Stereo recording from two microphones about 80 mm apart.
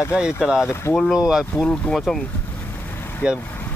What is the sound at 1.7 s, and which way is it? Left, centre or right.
Speech, centre.